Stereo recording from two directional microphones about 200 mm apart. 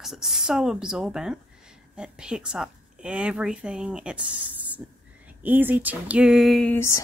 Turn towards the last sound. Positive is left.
turn(degrees=10)  # may be behind; listen again after turning